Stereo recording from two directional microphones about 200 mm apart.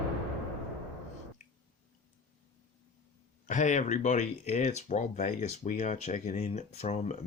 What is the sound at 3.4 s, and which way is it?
Speech, 40° left (ahead or behind).